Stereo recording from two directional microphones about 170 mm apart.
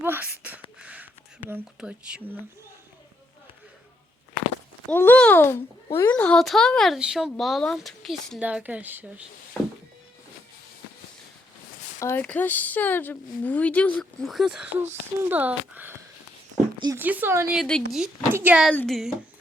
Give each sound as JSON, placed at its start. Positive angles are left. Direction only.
{"t": 0.0, "sound": "a sound", "side_deg": -10}
{"t": 0.8, "sound": "whispering", "side_deg": -10}
{"t": 4.9, "sound": "a child's voice", "side_deg": 10}
{"t": 11.9, "sound": "speech", "side_deg": 15}
{"t": 17.6, "sound": "a child's voice", "side_deg": 5}
{"t": 18.7, "sound": "a child's voice", "side_deg": 5}